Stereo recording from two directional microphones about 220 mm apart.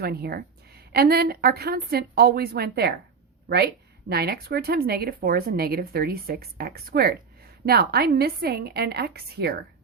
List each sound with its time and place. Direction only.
0.0 s speech: 45° right (ahead or behind)
4.1 s speech: 45° right (ahead or behind)